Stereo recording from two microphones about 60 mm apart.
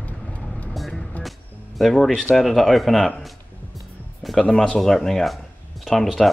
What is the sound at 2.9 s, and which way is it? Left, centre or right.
Speech, centre.